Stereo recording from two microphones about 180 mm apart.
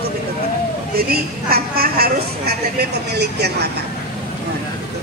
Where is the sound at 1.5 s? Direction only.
55° right (ahead or behind).